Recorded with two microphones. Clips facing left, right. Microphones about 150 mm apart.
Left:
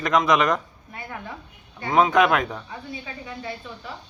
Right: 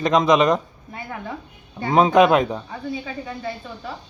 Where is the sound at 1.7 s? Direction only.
25° right (ahead or behind).